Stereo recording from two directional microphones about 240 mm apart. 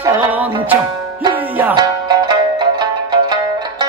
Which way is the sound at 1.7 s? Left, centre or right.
Centre.